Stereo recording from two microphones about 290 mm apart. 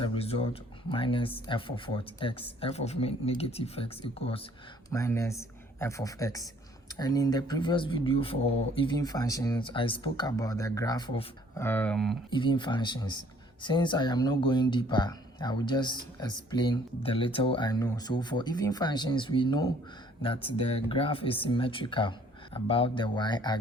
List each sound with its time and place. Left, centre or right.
0.0 s speech: centre
12.3 s speech: centre